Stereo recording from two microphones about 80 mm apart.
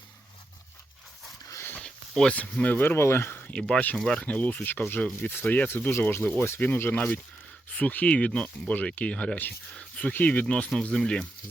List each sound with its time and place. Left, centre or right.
1.8 s speech: centre; by 3.5 s left
3.5 s speech: centre